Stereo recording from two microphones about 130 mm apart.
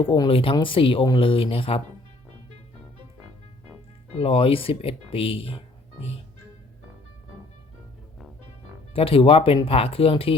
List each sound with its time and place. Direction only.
0.0 s speech: 40° left (ahead or behind)
4.1 s speech: 45° left (ahead or behind)
8.9 s speech: 45° left (ahead or behind)